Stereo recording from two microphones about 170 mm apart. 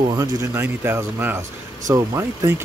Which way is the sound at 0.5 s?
15° right (ahead or behind).